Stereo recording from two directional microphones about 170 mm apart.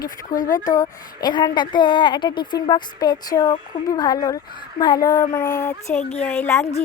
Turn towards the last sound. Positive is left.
turn(degrees=15)  # may be behind; listen again after turning